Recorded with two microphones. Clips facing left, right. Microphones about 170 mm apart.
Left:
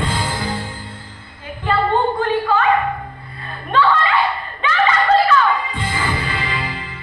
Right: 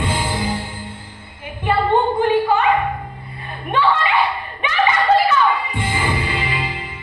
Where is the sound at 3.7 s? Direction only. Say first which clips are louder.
Left 1 dB; 15° right (ahead or behind).